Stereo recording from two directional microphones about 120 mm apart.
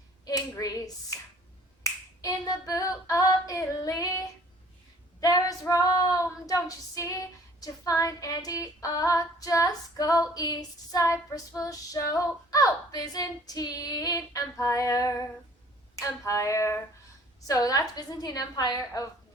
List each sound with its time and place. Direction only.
0.3 s a sound: 30° left (ahead or behind)
2.2 s female singing: 30° left (ahead or behind)
5.2 s female singing: 30° left (ahead or behind)
17.4 s a woman's voice: 30° left (ahead or behind)